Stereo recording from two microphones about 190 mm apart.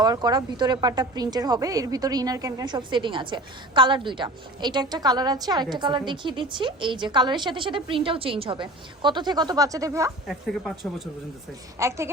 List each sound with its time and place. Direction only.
0.0 s speech: 20° right (ahead or behind)
11.8 s a woman's voice: 15° right (ahead or behind)